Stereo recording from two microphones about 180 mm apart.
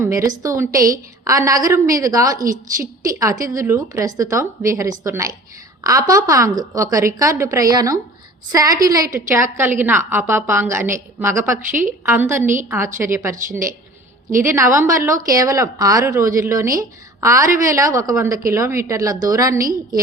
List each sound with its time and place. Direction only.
0.0 s a woman's voice: 15° right (ahead or behind)
2.4 s speech: 50° right (ahead or behind)
2.8 s a woman's voice: 20° right (ahead or behind)
13.3 s speech: 45° right (ahead or behind)
14.4 s a woman's voice: 15° right (ahead or behind)